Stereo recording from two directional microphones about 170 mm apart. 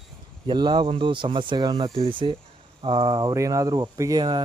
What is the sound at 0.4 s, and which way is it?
Speech, 25° right (ahead or behind).